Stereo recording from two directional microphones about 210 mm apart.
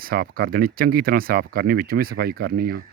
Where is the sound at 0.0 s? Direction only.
45° right (ahead or behind).